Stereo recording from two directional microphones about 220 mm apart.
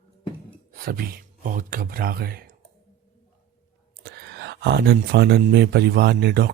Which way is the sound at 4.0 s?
50° right (ahead or behind).